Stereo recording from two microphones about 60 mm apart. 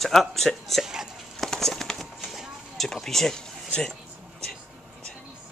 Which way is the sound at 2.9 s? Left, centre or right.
Centre.